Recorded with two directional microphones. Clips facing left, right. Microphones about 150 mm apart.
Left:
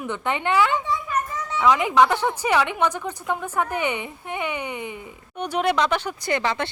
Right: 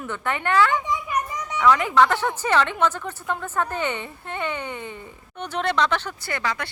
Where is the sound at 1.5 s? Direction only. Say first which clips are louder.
Even; 15° left (ahead or behind).